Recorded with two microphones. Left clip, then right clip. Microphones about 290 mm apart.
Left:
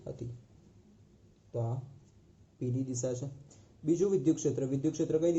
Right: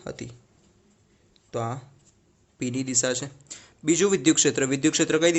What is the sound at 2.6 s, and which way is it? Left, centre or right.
Speech, right.